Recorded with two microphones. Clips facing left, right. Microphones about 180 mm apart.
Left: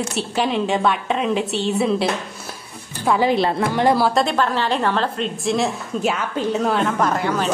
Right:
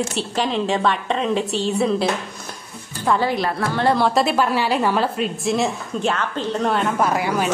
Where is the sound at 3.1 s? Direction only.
15° left (ahead or behind).